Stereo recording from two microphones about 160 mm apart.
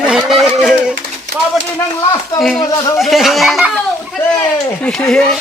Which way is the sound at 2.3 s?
Centre (ahead or behind).